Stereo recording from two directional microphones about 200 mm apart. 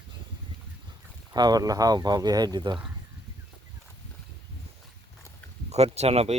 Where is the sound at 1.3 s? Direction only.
20° right (ahead or behind).